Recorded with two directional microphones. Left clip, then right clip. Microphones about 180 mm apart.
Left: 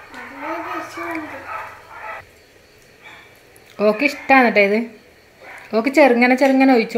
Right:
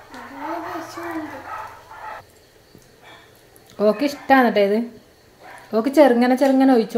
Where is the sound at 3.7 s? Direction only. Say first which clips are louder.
Left 2 dB; 5° right (ahead or behind).